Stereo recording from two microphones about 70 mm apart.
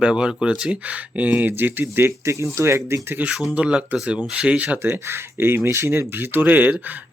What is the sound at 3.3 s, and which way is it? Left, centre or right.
Speech, centre.